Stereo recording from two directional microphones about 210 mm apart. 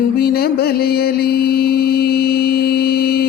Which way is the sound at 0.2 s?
45° left (ahead or behind).